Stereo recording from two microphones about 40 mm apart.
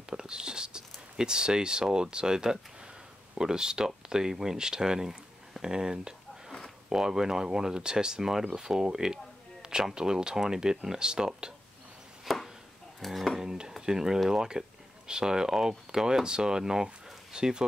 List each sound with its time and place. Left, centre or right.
0.1 s speech: centre
12.3 s chopping: centre
13.0 s speech: centre
13.4 s speech: centre